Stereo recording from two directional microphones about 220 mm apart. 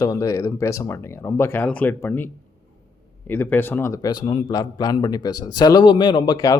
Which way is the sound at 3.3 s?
10° left (ahead or behind).